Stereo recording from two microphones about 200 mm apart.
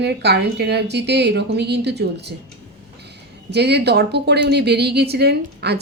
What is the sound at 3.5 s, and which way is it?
A woman's voice, 55° right (ahead or behind).